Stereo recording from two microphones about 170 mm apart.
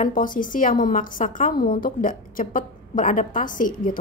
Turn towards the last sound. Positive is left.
turn(degrees=55)  # may be behind; listen again after turning